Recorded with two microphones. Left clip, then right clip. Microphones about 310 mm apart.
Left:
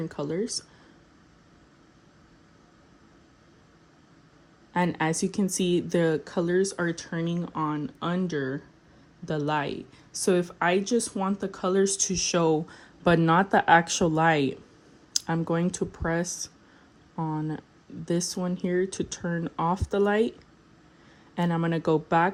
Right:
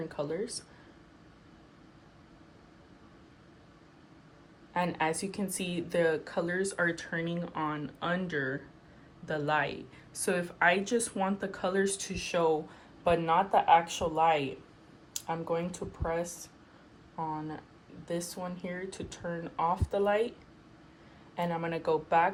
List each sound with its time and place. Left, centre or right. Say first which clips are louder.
0.1 s speech: left 4 dB; left
4.7 s speech: left 4 dB; left
21.3 s speech: left 4 dB; left